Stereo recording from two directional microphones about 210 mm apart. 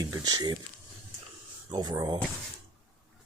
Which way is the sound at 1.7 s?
20° right (ahead or behind).